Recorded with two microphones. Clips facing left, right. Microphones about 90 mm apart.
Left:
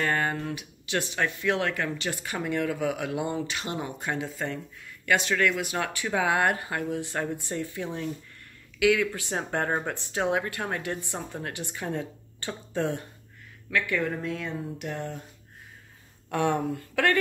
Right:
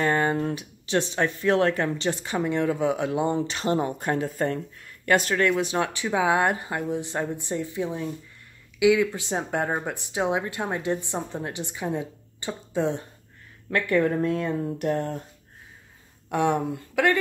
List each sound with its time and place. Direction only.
0.0 s speech: 25° right (ahead or behind); by 5.3 s 45° right (ahead or behind)
5.6 s speech: 25° right (ahead or behind)
9.4 s speech: 10° right (ahead or behind)
13.7 s speech: 40° right (ahead or behind)
16.3 s speech: 15° right (ahead or behind)